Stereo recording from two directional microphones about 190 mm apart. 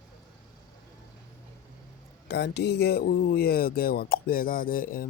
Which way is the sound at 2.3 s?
60° left (ahead or behind).